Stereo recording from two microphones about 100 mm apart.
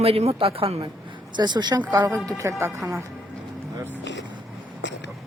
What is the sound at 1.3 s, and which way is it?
Speech, 45° right (ahead or behind).